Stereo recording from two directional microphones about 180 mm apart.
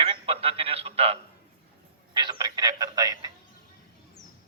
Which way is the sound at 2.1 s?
25° right (ahead or behind).